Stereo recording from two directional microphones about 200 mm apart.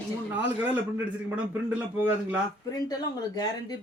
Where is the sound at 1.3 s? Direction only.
10° right (ahead or behind).